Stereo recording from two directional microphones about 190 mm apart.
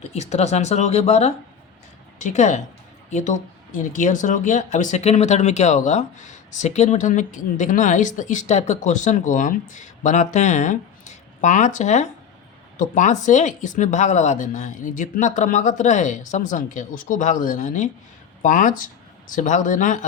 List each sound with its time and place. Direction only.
0.1 s speech: 35° left (ahead or behind)